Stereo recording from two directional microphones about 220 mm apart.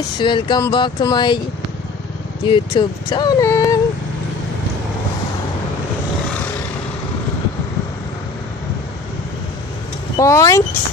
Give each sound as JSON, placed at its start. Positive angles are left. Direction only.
{"t": 0.2, "sound": "speech", "side_deg": 20}
{"t": 2.5, "sound": "speech", "side_deg": 20}
{"t": 10.1, "sound": "speech", "side_deg": 15}